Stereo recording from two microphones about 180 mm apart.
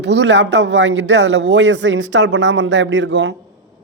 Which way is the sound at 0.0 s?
75° right (ahead or behind).